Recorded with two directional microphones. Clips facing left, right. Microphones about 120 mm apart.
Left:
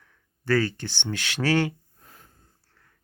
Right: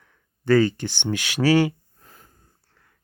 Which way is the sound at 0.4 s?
20° right (ahead or behind).